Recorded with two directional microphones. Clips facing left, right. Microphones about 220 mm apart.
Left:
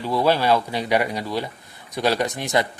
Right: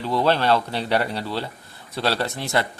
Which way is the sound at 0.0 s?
10° left (ahead or behind).